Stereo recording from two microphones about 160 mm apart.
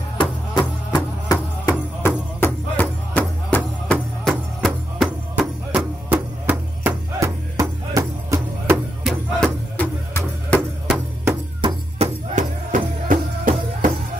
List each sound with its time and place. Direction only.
0.2 s music: 30° left (ahead or behind); by 5.9 s 5° right (ahead or behind)
6.0 s a sound: 10° right (ahead or behind)
6.8 s music: 20° right (ahead or behind)
9.0 s music: 10° left (ahead or behind)
11.6 s music: 40° right (ahead or behind)
12.7 s music: 55° right (ahead or behind)